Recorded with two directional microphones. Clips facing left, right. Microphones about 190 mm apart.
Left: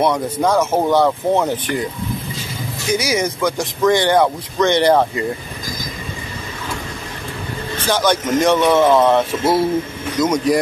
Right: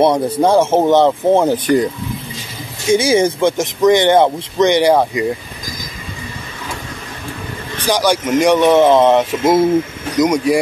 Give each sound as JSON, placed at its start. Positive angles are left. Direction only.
{"t": 0.0, "sound": "speech", "side_deg": -30}
{"t": 2.9, "sound": "speech", "side_deg": -25}
{"t": 7.8, "sound": "speech", "side_deg": -10}